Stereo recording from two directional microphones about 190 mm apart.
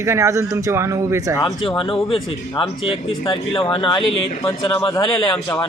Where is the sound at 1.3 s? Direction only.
20° left (ahead or behind).